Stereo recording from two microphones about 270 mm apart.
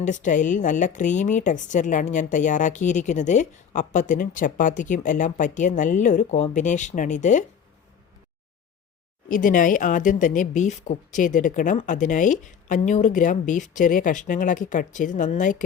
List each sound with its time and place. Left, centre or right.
0.0 s a woman's voice: left
9.3 s a woman's voice: left